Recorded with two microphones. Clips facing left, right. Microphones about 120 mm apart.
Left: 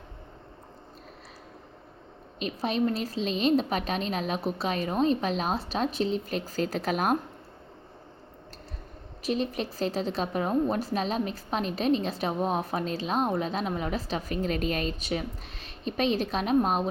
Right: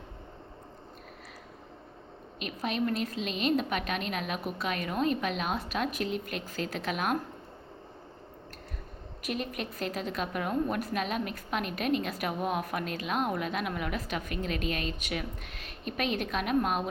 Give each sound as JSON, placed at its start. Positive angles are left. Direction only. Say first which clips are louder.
{"t": 2.4, "sound": "a woman's voice", "louder": "left 4 dB", "side_deg": 35}
{"t": 9.2, "sound": "a woman's voice", "louder": "left 6 dB", "side_deg": 30}